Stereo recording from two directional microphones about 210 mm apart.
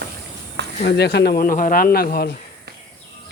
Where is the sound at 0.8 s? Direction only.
50° left (ahead or behind).